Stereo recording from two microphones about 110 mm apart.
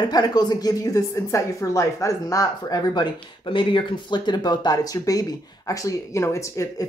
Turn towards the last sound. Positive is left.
turn(degrees=30)  # may be behind; listen again after turning